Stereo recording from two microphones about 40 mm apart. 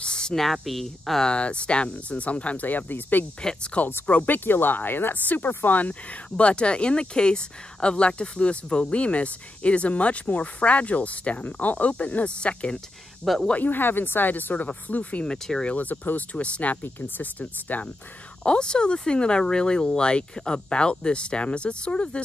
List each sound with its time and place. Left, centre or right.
0.0 s a sound: centre
0.4 s speech: centre
1.2 s speech: left
4.0 s speech: left
4.5 s speech: left
6.3 s speech: left
12.4 s speech: left
13.2 s speech: centre
13.7 s speech: left
15.2 s speech: centre
15.6 s speech: left
17.2 s speech: left
18.4 s speech: left